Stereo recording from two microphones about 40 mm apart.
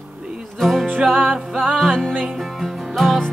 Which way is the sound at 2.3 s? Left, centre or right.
Centre.